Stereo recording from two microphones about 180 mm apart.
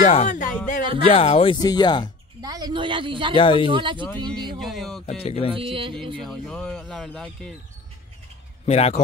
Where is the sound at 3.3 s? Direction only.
30° left (ahead or behind).